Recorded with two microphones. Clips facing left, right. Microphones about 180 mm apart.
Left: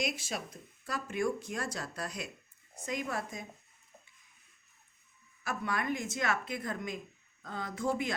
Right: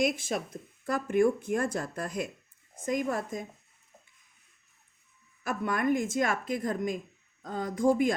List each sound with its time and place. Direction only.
0.0 s speech: 50° right (ahead or behind)
5.4 s speech: 50° right (ahead or behind)